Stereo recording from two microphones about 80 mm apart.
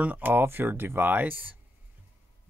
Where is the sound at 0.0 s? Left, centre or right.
Right.